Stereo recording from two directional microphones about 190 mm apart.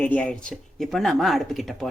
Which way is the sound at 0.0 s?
10° left (ahead or behind).